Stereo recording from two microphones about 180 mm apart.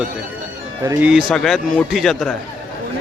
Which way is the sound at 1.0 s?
Centre (ahead or behind).